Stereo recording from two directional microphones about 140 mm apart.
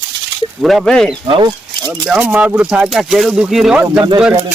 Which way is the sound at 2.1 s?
10° right (ahead or behind).